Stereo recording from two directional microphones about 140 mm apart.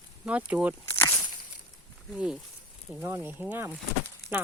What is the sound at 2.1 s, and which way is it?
Speech, 5° right (ahead or behind).